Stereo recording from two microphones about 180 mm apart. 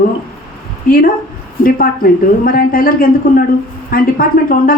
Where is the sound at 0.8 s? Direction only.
50° left (ahead or behind).